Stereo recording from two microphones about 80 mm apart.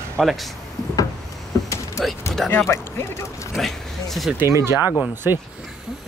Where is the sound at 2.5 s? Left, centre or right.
Left.